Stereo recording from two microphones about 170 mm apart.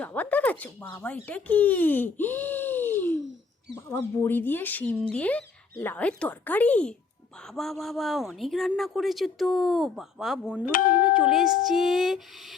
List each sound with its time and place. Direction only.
0.0 s a woman's voice: 10° left (ahead or behind); by 10.7 s 5° right (ahead or behind)
10.7 s speech: 55° left (ahead or behind)
11.0 s a woman's voice: 5° right (ahead or behind)